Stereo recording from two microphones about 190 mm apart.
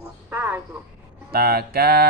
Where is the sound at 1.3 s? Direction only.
55° right (ahead or behind).